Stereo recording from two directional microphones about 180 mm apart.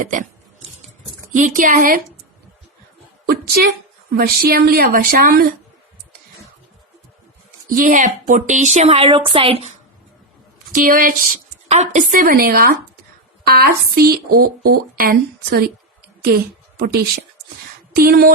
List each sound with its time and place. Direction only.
0.0 s speech: 45° right (ahead or behind)
1.3 s speech: 45° right (ahead or behind)
3.2 s a woman's voice: 55° right (ahead or behind)
7.8 s a woman's voice: 45° right (ahead or behind)
10.7 s a woman's voice: 50° right (ahead or behind)